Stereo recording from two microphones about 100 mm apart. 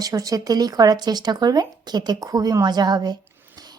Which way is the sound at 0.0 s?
35° right (ahead or behind).